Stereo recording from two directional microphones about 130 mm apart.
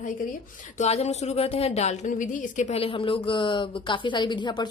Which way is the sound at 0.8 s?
55° left (ahead or behind).